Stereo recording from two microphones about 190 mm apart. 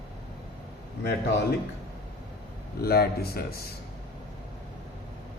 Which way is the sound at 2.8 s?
55° left (ahead or behind).